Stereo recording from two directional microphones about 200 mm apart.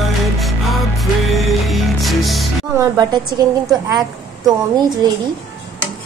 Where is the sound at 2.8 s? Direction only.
20° right (ahead or behind).